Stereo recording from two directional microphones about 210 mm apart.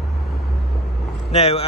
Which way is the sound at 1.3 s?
30° left (ahead or behind).